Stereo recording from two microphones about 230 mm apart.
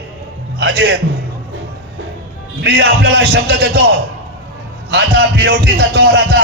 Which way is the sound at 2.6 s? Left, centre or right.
Right.